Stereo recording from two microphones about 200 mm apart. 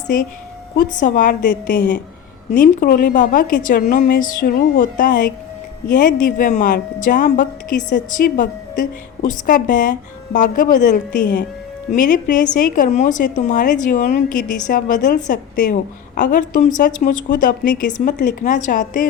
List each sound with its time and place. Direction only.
0.8 s a woman's voice: 40° left (ahead or behind)
2.5 s a woman's voice: 45° left (ahead or behind)